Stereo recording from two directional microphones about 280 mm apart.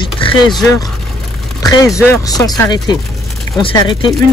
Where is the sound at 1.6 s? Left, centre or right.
Centre.